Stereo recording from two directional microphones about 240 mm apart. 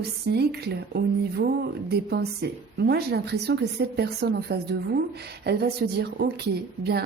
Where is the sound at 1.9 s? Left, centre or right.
Right.